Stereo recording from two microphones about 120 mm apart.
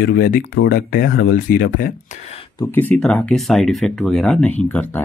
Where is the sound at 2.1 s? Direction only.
60° left (ahead or behind).